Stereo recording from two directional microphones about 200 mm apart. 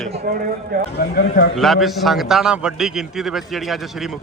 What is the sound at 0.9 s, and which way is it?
Speech, 50° left (ahead or behind).